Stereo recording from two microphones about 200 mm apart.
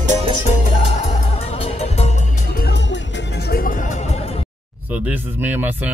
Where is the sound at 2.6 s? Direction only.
55° left (ahead or behind).